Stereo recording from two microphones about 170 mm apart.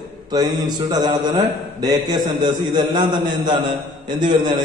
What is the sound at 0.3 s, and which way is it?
A man's voice, 25° right (ahead or behind).